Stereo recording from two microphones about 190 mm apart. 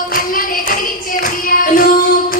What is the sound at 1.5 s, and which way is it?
Child singing, 50° left (ahead or behind).